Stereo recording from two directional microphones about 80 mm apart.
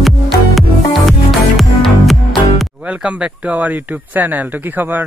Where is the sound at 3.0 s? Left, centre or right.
Centre.